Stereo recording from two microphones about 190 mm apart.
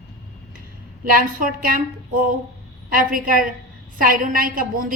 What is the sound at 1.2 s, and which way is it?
A woman's voice, 45° right (ahead or behind).